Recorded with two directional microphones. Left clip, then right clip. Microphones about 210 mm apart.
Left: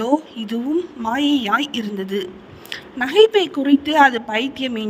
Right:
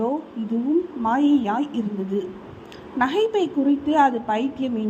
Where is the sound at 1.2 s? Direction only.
60° left (ahead or behind).